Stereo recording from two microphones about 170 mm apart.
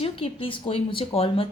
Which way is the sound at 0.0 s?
30° left (ahead or behind).